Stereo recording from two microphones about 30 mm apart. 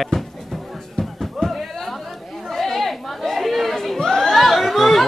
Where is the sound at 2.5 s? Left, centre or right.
Centre.